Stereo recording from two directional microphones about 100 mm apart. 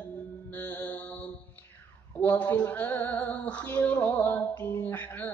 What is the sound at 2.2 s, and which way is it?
Female singing, 15° left (ahead or behind).